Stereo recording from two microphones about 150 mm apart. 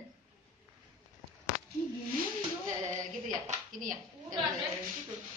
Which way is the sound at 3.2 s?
60° right (ahead or behind).